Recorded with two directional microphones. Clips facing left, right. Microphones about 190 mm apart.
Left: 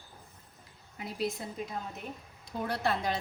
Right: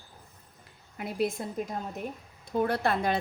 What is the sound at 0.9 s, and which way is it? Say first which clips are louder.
A woman's voice: right 5 dB; 55° right (ahead or behind).